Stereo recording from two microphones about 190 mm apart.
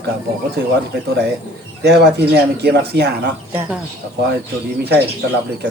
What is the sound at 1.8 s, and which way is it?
Speech, 60° right (ahead or behind).